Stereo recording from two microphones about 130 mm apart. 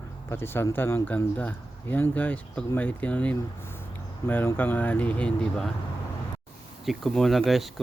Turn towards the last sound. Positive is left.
turn(degrees=0)  # may be behind; listen again after turning